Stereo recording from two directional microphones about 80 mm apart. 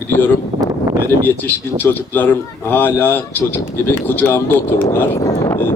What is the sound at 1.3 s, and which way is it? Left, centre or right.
Speech, left.